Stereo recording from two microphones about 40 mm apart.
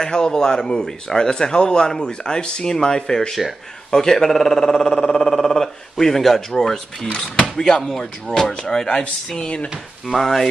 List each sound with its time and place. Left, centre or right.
0.0 s speech: centre
10.0 s speech: centre